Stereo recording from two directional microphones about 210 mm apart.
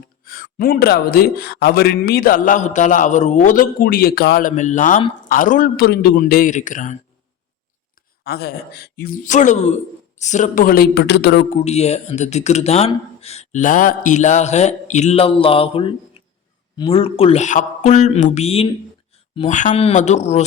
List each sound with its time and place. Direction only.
0.3 s a man's voice: 45° left (ahead or behind)
8.2 s a man's voice: 50° left (ahead or behind)
11.5 s speech: 30° left (ahead or behind)